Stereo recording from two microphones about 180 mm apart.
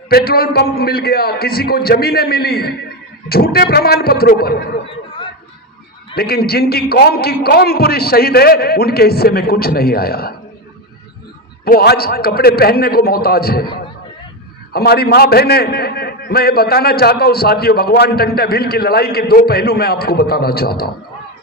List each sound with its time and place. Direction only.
0.1 s a man's voice: 60° left (ahead or behind)
4.9 s a sound: 30° left (ahead or behind)
6.1 s a man's voice: 60° left (ahead or behind)
11.6 s a man's voice: 60° left (ahead or behind)